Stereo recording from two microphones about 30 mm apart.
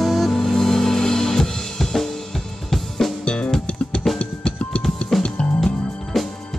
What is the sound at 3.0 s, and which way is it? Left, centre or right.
Music, centre.